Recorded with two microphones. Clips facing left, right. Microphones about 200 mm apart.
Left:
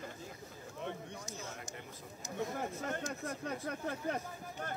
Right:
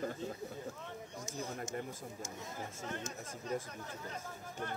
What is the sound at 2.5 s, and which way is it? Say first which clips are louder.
Speech: left 4 dB; 60° left (ahead or behind).